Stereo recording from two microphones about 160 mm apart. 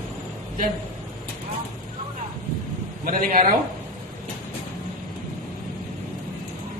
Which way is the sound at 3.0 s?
60° right (ahead or behind).